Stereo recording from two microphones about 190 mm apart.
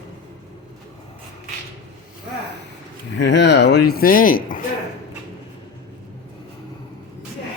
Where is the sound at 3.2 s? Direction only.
65° left (ahead or behind); by 4.6 s 45° left (ahead or behind).